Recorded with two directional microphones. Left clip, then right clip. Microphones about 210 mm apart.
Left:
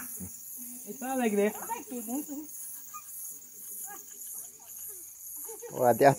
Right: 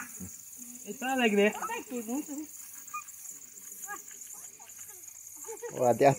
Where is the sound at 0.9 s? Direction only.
10° left (ahead or behind).